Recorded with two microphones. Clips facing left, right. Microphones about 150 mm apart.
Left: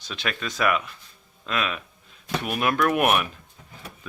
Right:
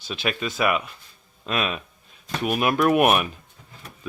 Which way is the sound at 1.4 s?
25° right (ahead or behind).